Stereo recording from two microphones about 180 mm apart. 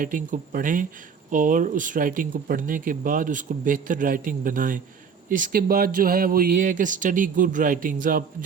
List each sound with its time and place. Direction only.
0.0 s speech: 45° right (ahead or behind)